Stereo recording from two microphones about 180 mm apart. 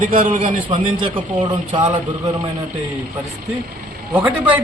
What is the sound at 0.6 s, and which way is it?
Speech, 25° right (ahead or behind).